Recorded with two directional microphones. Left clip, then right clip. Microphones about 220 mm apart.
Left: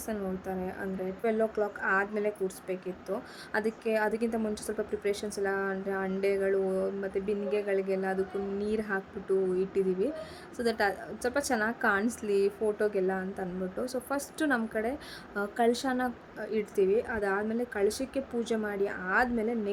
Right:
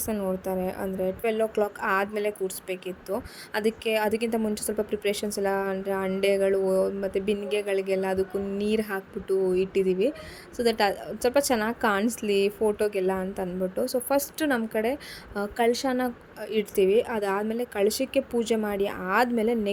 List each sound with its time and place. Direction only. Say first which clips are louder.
0.0 s a woman's voice: right 6 dB; 20° right (ahead or behind)